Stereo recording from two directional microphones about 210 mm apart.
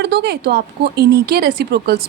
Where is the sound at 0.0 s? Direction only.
55° right (ahead or behind).